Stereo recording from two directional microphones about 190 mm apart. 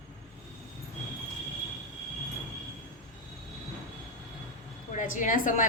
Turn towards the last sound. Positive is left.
turn(degrees=45)  # may be behind; listen again after turning